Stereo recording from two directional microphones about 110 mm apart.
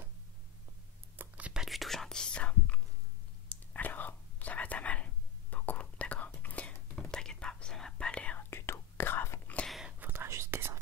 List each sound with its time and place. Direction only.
1.1 s whispering: 15° right (ahead or behind); by 9.6 s 20° left (ahead or behind)
9.6 s whispering: centre (ahead or behind)
9.9 s whispering: 20° right (ahead or behind)